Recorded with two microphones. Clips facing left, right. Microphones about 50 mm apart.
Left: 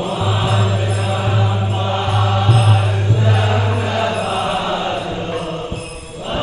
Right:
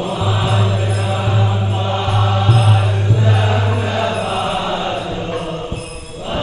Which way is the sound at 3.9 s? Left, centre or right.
Centre.